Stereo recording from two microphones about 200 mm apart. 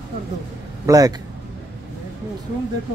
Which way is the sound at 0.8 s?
15° right (ahead or behind).